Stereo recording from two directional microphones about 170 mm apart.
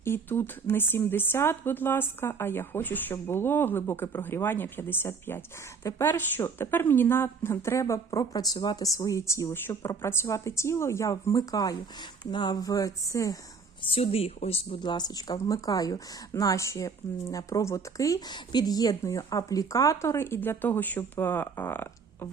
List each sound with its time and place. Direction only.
0.0 s a woman's voice: 10° left (ahead or behind)
13.8 s speech: 35° left (ahead or behind); by 22.3 s 15° left (ahead or behind)